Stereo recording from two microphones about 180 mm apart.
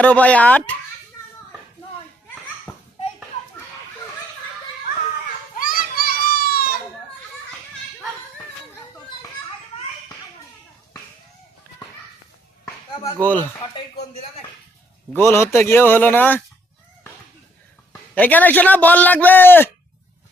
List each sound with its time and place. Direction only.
0.0 s a man's voice: 5° left (ahead or behind)
2.7 s children playing: 15° left (ahead or behind)
5.5 s children playing: 50° left (ahead or behind)
12.6 s chop: 20° left (ahead or behind)
13.2 s a man's voice: 10° left (ahead or behind)
15.1 s a man's voice: 15° left (ahead or behind)
18.1 s a man's voice: 10° left (ahead or behind)